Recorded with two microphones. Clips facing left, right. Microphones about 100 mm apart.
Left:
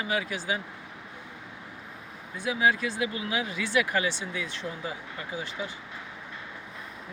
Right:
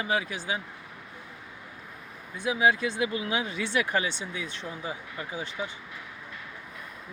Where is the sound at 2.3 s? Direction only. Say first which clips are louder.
Right 1 dB; 20° right (ahead or behind).